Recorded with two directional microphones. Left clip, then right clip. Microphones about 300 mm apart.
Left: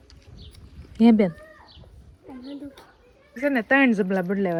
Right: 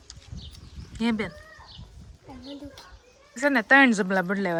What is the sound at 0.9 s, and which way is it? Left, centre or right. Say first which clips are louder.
Speech: left 9 dB; centre.